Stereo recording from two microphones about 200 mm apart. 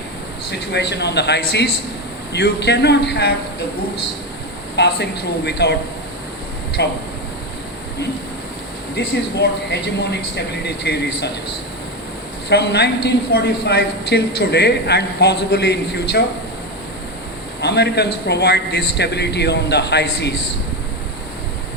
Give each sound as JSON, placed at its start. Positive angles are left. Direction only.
{"t": 0.5, "sound": "a woman's voice", "side_deg": 60}
{"t": 4.8, "sound": "a woman's voice", "side_deg": 55}
{"t": 6.8, "sound": "a woman's voice", "side_deg": 55}
{"t": 9.0, "sound": "a woman's voice", "side_deg": 60}
{"t": 12.5, "sound": "a woman's voice", "side_deg": 55}
{"t": 17.6, "sound": "a woman's voice", "side_deg": 55}